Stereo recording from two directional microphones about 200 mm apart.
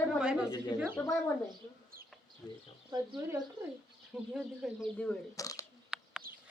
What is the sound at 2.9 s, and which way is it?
Speech, 15° right (ahead or behind).